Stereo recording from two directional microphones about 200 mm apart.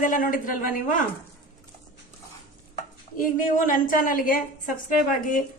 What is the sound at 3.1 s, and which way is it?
A woman's voice, 45° left (ahead or behind).